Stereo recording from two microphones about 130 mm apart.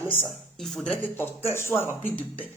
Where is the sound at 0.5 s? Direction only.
Centre (ahead or behind).